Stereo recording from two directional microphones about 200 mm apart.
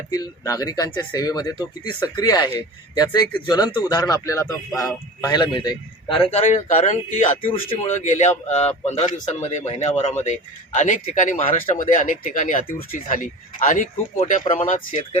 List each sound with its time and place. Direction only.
0.1 s speech: 15° left (ahead or behind)
6.4 s speech: 35° left (ahead or behind)